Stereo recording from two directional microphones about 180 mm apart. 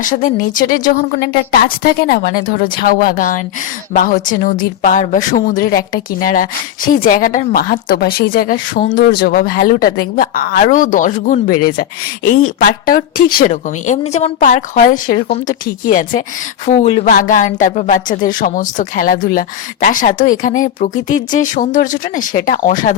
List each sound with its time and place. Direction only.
0.0 s speech: 50° left (ahead or behind)
8.9 s speech: 75° left (ahead or behind); by 23.0 s 45° left (ahead or behind)